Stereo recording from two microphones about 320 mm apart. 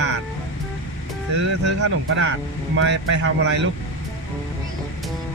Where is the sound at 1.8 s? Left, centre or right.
Right.